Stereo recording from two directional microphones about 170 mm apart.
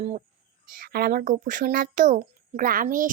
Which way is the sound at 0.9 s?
60° right (ahead or behind).